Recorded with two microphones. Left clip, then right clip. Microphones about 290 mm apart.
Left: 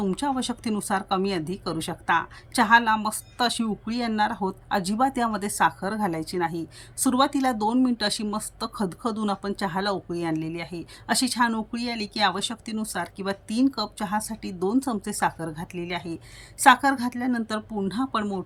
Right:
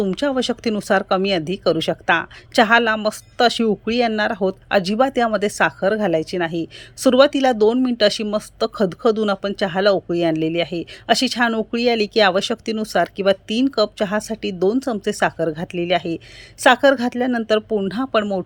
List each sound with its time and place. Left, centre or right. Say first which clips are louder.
0.1 s a woman's voice: right 7 dB; centre